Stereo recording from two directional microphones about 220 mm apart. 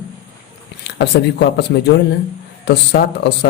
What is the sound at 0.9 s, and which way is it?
Speech, 50° left (ahead or behind).